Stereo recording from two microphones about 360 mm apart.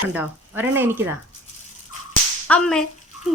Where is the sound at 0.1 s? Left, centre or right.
Centre.